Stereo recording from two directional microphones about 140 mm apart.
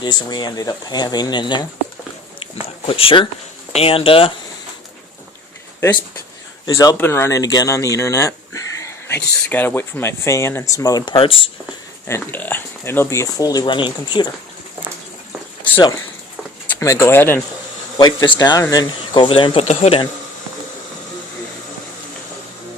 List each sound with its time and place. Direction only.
0.0 s speech: 30° left (ahead or behind)
2.8 s speech: 40° left (ahead or behind)
6.7 s speech: 25° left (ahead or behind); by 11.5 s 40° left (ahead or behind)
12.0 s speech: 15° left (ahead or behind); by 14.3 s 35° left (ahead or behind)
16.8 s speech: 20° left (ahead or behind)
17.9 s speech: 35° left (ahead or behind)
19.6 s speech: 50° left (ahead or behind)